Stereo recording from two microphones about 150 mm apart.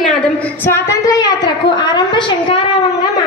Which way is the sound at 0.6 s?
20° left (ahead or behind).